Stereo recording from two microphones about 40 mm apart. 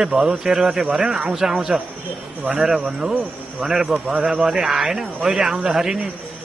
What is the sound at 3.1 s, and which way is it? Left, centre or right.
A man's voice, centre.